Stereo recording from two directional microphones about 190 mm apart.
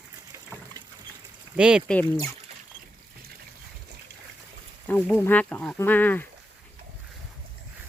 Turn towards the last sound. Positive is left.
turn(degrees=10)  # may be behind; listen again after turning